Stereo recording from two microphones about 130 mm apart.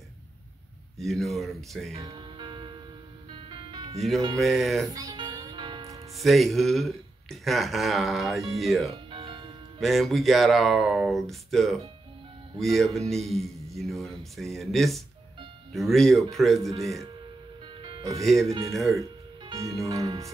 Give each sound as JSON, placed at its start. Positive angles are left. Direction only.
{"t": 0.9, "sound": "speech", "side_deg": 0}
{"t": 1.9, "sound": "music", "side_deg": -25}
{"t": 4.4, "sound": "speech", "side_deg": 0}
{"t": 4.9, "sound": "music", "side_deg": -30}
{"t": 6.1, "sound": "speech", "side_deg": 0}
{"t": 9.1, "sound": "music", "side_deg": -40}
{"t": 9.8, "sound": "speech", "side_deg": 0}
{"t": 16.7, "sound": "speech", "side_deg": -25}
{"t": 18.2, "sound": "speech", "side_deg": 0}
{"t": 19.5, "sound": "speech", "side_deg": -25}